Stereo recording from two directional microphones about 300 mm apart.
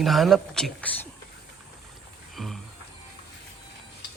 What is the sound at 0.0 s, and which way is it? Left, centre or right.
Speech, centre.